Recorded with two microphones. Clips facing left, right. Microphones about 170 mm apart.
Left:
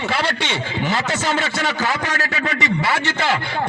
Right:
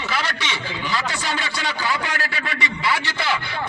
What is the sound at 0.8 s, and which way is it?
A man's voice, 45° left (ahead or behind).